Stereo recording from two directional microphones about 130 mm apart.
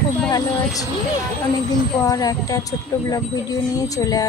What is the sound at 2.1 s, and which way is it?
Speech, 30° left (ahead or behind).